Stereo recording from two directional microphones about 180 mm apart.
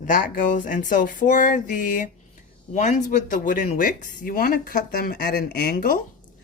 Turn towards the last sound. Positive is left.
turn(degrees=50)  # may be behind; listen again after turning